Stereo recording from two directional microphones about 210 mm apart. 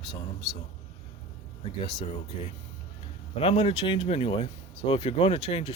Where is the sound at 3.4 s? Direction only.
25° left (ahead or behind).